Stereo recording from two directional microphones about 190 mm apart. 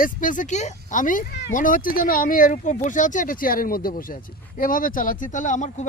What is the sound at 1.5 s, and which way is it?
Speech, 45° left (ahead or behind).